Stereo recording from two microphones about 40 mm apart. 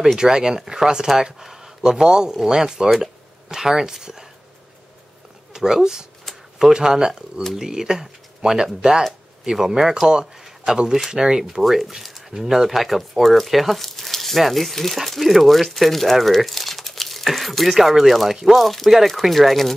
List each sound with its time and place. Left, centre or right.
0.2 s speech: centre
5.5 s speech: centre
10.4 s a sound: centre
11.1 s speech: centre
11.6 s speech: centre